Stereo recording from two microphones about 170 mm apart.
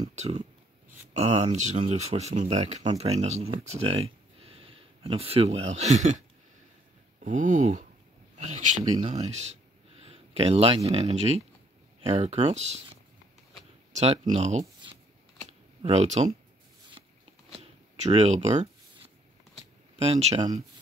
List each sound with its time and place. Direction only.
0.1 s speech: 40° right (ahead or behind)
7.2 s speech: 50° right (ahead or behind)
15.8 s speech: 40° right (ahead or behind)
17.0 s a sound: 30° right (ahead or behind)
17.6 s shuffling cards: 40° right (ahead or behind)
20.0 s speech: 40° right (ahead or behind)